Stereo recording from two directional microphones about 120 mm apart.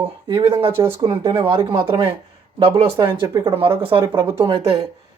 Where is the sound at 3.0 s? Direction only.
30° right (ahead or behind).